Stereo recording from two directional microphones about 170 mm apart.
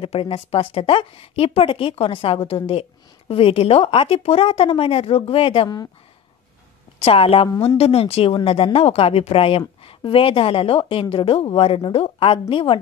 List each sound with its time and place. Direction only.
0.0 s a woman's voice: 35° left (ahead or behind)
7.0 s a woman's voice: 35° left (ahead or behind)